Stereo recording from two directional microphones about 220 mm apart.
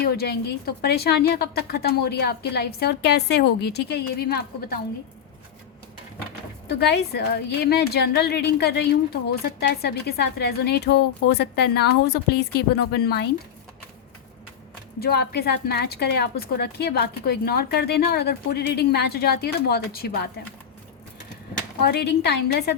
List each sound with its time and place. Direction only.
0.0 s a woman's voice: 45° left (ahead or behind)
6.7 s a woman's voice: 50° left (ahead or behind)
15.0 s a woman's voice: 45° left (ahead or behind)
21.8 s a woman's voice: 50° left (ahead or behind)